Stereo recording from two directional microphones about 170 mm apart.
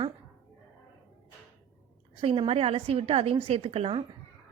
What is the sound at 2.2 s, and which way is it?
A woman's voice, 35° right (ahead or behind).